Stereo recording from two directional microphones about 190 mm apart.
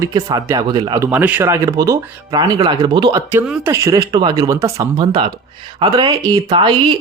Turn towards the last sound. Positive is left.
turn(degrees=-25)  # may be behind; listen again after turning